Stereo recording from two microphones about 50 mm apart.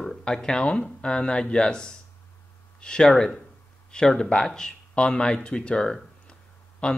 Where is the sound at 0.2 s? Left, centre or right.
Centre.